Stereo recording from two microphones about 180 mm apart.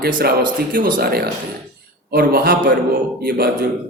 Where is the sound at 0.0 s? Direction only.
55° right (ahead or behind).